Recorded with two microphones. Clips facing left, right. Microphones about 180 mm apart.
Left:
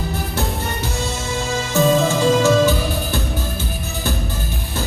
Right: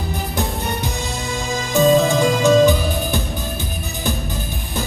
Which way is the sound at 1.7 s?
15° right (ahead or behind).